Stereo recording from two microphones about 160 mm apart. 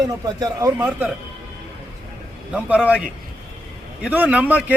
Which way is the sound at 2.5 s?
10° right (ahead or behind).